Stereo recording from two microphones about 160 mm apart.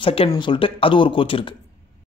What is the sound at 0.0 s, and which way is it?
Speech, 35° left (ahead or behind).